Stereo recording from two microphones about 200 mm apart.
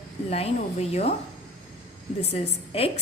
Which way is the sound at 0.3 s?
30° left (ahead or behind).